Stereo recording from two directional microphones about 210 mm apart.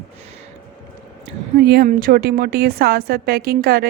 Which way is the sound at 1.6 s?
45° right (ahead or behind).